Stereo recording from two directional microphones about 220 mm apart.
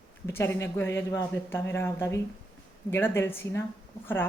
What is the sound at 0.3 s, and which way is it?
Speech, 10° left (ahead or behind).